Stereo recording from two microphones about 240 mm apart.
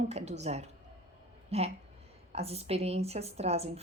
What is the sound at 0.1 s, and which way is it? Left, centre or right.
A woman's voice, right.